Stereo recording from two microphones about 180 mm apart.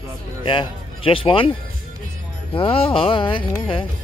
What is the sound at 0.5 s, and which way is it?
Music, 30° left (ahead or behind).